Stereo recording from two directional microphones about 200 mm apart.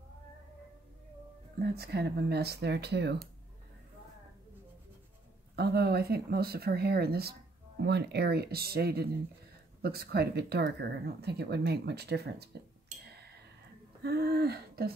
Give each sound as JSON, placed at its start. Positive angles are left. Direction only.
{"t": 1.6, "sound": "speech", "side_deg": -50}
{"t": 5.6, "sound": "speech", "side_deg": -50}
{"t": 14.0, "sound": "a sound", "side_deg": -50}